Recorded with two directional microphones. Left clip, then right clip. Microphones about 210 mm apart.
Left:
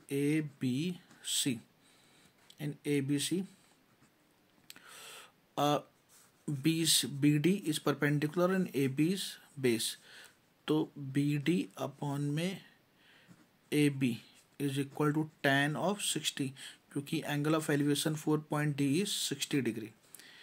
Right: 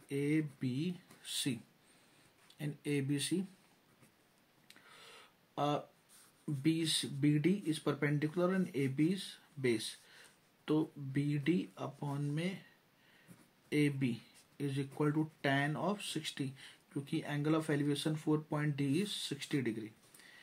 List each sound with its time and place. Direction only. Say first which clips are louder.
0.1 s speech: left 3 dB; 35° left (ahead or behind)
2.6 s speech: left 4 dB; 30° left (ahead or behind)
4.6 s a sound: left 6 dB; 40° left (ahead or behind)
6.6 s speech: left 4 dB; 40° left (ahead or behind)
13.7 s speech: left 3 dB; 35° left (ahead or behind)